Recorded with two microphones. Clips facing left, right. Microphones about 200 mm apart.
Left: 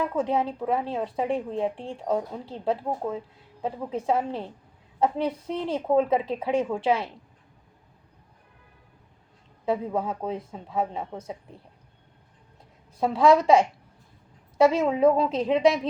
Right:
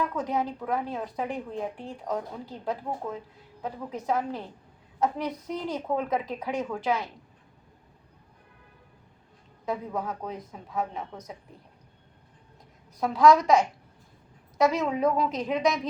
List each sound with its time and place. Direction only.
0.0 s speech: 30° left (ahead or behind)
9.6 s speech: 30° left (ahead or behind)
13.0 s speech: 30° left (ahead or behind)